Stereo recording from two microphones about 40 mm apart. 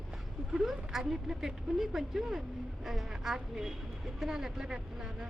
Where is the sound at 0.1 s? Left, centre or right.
Centre.